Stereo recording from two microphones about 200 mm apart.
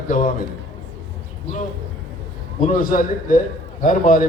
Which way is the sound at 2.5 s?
45° left (ahead or behind).